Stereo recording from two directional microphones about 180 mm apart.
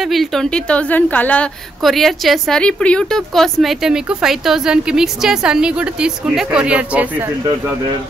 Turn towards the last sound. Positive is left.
turn(degrees=-10)  # may be behind; listen again after turning